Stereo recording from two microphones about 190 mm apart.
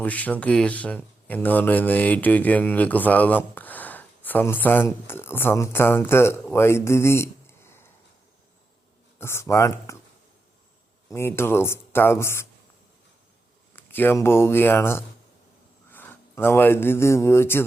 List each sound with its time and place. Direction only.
0.0 s speech: 10° left (ahead or behind)
9.1 s speech: 15° left (ahead or behind)
11.1 s speech: 10° left (ahead or behind)
13.7 s speech: 10° left (ahead or behind)